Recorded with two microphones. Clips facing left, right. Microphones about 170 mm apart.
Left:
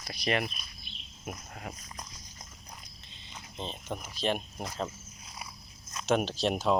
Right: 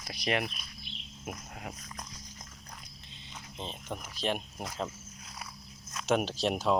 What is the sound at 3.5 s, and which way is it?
Speech, 5° right (ahead or behind).